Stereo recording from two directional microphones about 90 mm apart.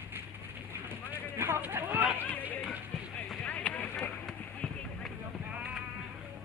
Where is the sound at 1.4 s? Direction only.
25° right (ahead or behind).